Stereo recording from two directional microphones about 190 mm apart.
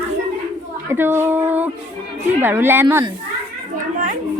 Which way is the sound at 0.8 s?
10° right (ahead or behind).